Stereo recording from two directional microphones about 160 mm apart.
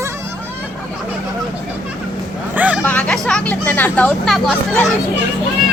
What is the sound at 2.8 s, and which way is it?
Music, 10° left (ahead or behind).